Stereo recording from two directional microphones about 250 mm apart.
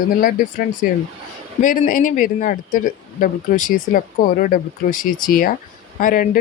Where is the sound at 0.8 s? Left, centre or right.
Left.